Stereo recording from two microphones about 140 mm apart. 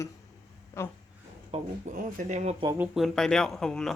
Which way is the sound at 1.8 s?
65° right (ahead or behind).